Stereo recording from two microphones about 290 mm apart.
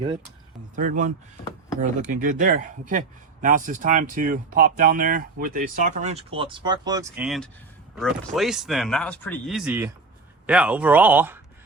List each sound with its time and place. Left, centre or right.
0.8 s speech: right; by 11.3 s centre